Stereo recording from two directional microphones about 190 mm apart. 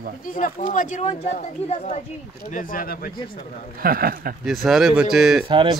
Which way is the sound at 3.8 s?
50° right (ahead or behind).